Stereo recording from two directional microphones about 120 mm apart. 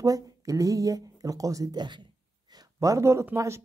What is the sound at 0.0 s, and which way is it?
Speech, 30° right (ahead or behind).